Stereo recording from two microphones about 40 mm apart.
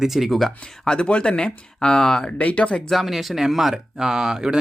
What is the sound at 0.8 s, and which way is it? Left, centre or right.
Speech, left.